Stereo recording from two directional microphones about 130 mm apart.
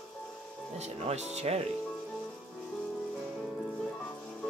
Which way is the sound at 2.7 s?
Centre (ahead or behind).